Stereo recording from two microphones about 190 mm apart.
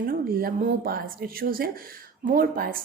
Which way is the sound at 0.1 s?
50° right (ahead or behind).